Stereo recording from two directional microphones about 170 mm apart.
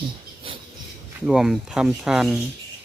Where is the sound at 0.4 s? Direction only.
30° right (ahead or behind).